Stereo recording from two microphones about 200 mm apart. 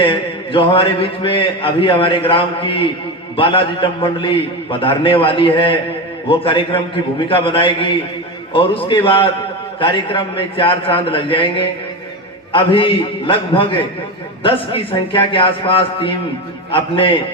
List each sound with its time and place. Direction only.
0.0 s mantra: 25° left (ahead or behind)